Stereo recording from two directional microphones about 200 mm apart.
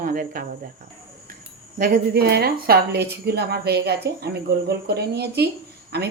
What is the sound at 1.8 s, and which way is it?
A woman's voice, 55° right (ahead or behind).